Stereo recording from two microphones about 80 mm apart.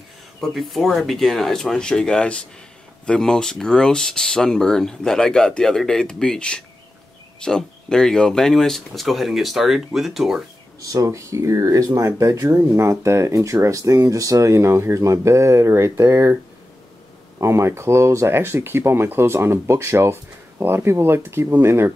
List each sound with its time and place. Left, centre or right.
0.4 s speech: centre
10.8 s speech: right
12.4 s speech: right
17.4 s speech: right